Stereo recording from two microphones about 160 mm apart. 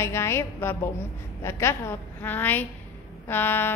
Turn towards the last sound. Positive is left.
turn(degrees=15)  # may be behind; listen again after turning